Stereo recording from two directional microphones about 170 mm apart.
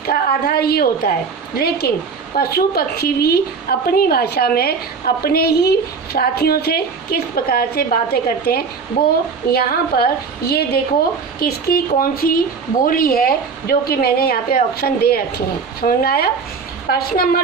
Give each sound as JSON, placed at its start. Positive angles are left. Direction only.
{"t": 0.0, "sound": "a woman's voice", "side_deg": 65}
{"t": 2.3, "sound": "a woman's voice", "side_deg": 65}